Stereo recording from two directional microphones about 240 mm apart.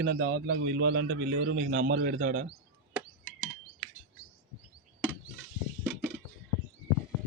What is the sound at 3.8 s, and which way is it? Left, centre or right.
Chirp, right.